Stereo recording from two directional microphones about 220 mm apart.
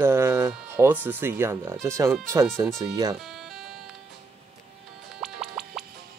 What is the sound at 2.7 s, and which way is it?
Speech, 15° right (ahead or behind).